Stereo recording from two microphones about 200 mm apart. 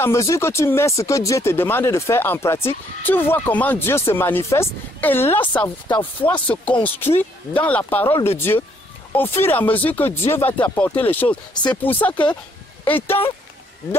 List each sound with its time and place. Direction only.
0.0 s speech: 15° left (ahead or behind)